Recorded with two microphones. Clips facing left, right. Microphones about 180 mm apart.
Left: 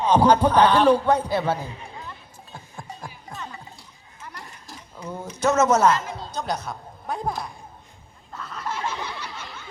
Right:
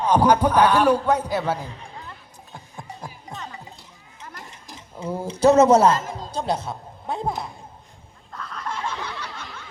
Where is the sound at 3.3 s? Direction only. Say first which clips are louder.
Even; 20° right (ahead or behind).